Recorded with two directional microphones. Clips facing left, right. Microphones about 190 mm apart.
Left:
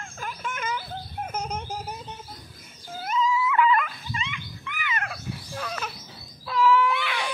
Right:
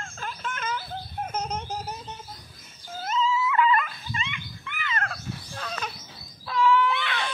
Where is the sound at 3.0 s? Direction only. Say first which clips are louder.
Left 1 dB; 15° left (ahead or behind).